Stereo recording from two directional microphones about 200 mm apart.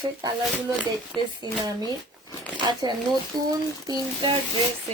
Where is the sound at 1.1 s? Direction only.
20° right (ahead or behind).